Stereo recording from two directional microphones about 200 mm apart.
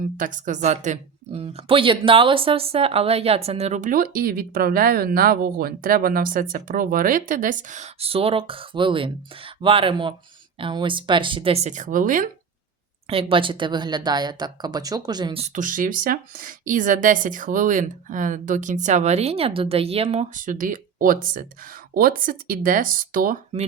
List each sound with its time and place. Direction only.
0.2 s speech: 40° right (ahead or behind)
13.1 s speech: 25° right (ahead or behind); by 23.4 s 45° right (ahead or behind)